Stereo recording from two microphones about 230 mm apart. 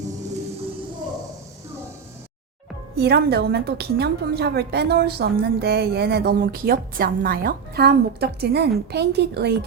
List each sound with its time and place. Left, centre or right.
2.9 s a woman's voice: right